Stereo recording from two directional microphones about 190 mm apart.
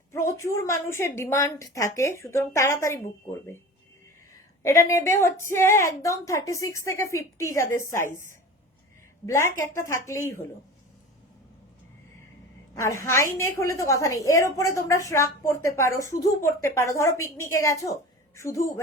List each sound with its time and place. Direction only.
0.1 s a woman's voice: 15° left (ahead or behind)
4.6 s a woman's voice: 15° left (ahead or behind)
9.2 s a woman's voice: 15° left (ahead or behind)
12.7 s a woman's voice: 15° left (ahead or behind)